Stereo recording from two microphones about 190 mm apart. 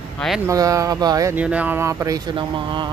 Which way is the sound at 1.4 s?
5° right (ahead or behind).